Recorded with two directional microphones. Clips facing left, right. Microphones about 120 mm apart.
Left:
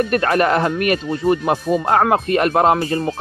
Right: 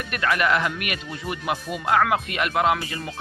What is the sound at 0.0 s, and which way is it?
Speech, 40° left (ahead or behind).